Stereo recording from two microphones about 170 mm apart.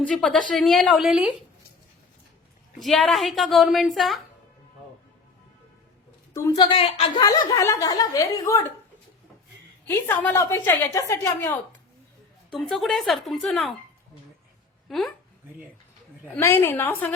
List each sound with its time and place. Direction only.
0.0 s a woman's voice: 5° left (ahead or behind)
2.7 s a woman's voice: centre (ahead or behind)
6.6 s speech: 30° left (ahead or behind)
7.2 s a woman's voice: 20° left (ahead or behind)
9.8 s a woman's voice: 10° left (ahead or behind)
12.5 s a woman's voice: centre (ahead or behind)
14.8 s speech: centre (ahead or behind)
16.3 s a woman's voice: 15° left (ahead or behind)